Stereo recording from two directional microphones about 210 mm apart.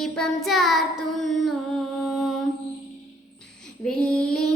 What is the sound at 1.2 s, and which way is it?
Singing, centre (ahead or behind).